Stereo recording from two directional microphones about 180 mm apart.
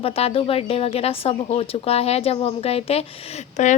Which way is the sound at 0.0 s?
35° left (ahead or behind).